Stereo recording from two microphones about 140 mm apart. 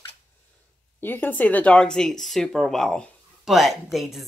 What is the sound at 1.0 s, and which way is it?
Speech, 15° left (ahead or behind).